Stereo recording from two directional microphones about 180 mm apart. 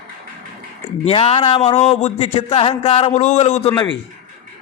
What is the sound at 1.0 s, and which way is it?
A man's voice, 35° left (ahead or behind).